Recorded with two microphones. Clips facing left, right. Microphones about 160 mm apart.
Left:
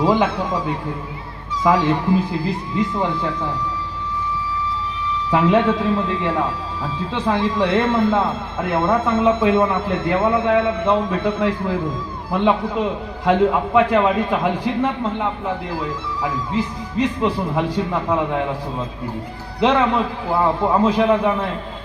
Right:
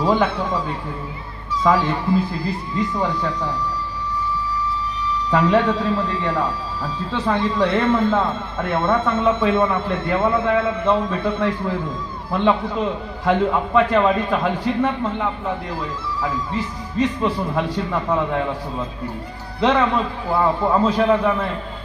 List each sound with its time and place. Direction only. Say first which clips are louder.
0.0 s a man's voice: left 1 dB; 15° left (ahead or behind)
1.6 s speech: left 2 dB; 10° left (ahead or behind)
5.3 s speech: left 1 dB; 15° left (ahead or behind)
5.6 s a man's voice: left 2 dB; 5° left (ahead or behind)
17.2 s speech: left 1 dB; 15° left (ahead or behind)
19.5 s speech: left 1 dB; 10° left (ahead or behind)